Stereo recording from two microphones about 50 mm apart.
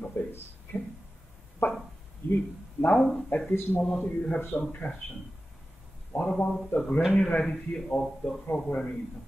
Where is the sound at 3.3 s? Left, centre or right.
Left.